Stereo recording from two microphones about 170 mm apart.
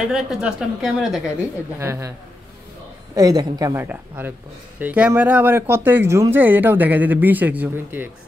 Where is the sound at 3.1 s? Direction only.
20° right (ahead or behind).